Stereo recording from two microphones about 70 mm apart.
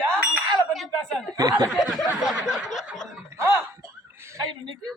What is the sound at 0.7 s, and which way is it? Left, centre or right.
Chink, centre.